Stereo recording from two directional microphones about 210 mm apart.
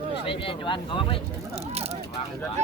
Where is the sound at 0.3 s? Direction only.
25° left (ahead or behind).